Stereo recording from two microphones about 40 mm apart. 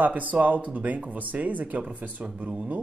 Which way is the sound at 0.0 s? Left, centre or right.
Right.